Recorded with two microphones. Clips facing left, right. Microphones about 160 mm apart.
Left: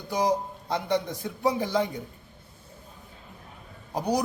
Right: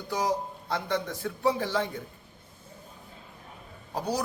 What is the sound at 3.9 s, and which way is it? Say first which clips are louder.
Speech: left 4 dB; 15° left (ahead or behind).